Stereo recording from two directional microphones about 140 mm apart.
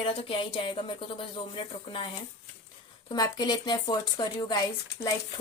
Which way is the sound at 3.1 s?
25° left (ahead or behind).